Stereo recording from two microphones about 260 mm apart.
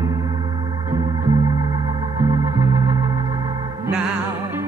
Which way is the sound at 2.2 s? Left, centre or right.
Centre.